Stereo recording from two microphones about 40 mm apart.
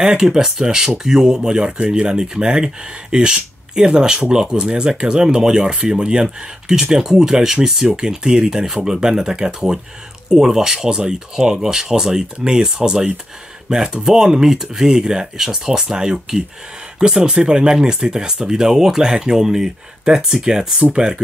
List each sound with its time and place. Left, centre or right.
0.2 s speech: centre